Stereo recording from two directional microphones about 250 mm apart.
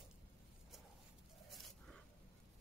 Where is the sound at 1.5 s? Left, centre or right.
Centre.